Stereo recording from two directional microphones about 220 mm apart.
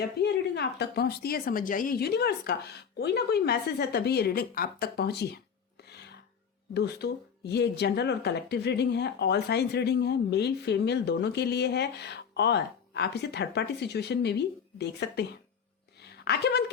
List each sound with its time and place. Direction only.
0.0 s speech: 50° left (ahead or behind)
5.9 s music: 50° left (ahead or behind)
6.7 s speech: 50° left (ahead or behind)
16.0 s a sound: 50° left (ahead or behind)